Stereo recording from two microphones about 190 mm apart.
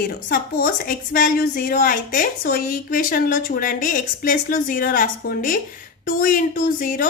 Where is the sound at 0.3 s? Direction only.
50° left (ahead or behind).